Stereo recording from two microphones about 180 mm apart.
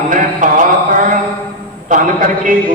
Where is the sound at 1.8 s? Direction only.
45° right (ahead or behind).